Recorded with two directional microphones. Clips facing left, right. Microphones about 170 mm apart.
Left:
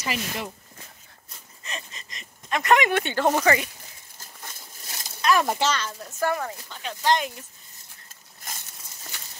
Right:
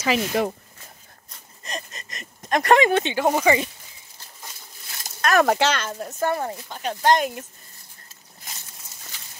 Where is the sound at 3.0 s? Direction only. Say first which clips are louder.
Right 2 dB; 15° right (ahead or behind).